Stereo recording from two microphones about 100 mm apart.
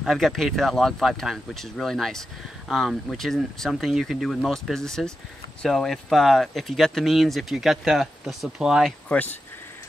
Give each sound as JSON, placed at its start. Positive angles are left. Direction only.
{"t": 0.0, "sound": "speech", "side_deg": 0}
{"t": 9.1, "sound": "speech", "side_deg": 15}